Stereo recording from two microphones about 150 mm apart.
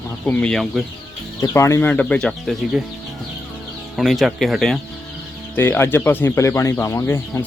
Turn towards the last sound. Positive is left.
turn(degrees=20)  # may be behind; listen again after turning